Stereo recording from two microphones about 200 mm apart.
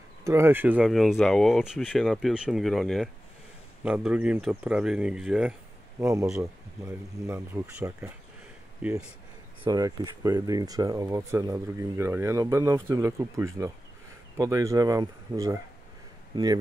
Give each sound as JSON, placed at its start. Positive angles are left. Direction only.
{"t": 0.2, "sound": "speech", "side_deg": -15}
{"t": 5.9, "sound": "speech", "side_deg": -15}
{"t": 9.6, "sound": "speech", "side_deg": -20}